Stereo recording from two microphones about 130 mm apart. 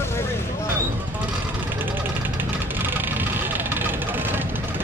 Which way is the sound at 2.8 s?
15° right (ahead or behind).